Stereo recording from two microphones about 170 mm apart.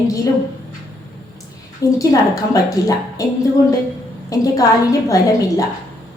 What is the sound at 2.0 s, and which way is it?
A woman's voice, 20° left (ahead or behind).